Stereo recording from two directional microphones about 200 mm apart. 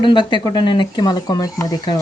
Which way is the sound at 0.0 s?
25° left (ahead or behind).